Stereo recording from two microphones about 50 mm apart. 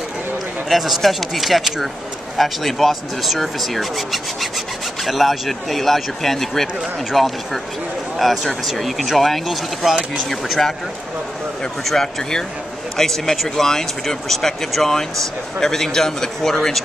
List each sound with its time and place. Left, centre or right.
0.7 s speech: centre
11.8 s speech: centre